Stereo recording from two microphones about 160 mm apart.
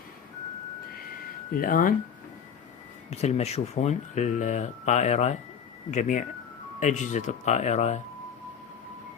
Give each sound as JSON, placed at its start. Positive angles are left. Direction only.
{"t": 1.5, "sound": "speech", "side_deg": 60}
{"t": 3.1, "sound": "speech", "side_deg": 45}